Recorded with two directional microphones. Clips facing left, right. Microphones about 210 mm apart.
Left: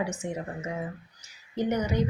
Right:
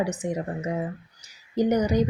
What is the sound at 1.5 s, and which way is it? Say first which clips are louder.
Speech: right 6 dB; 35° right (ahead or behind).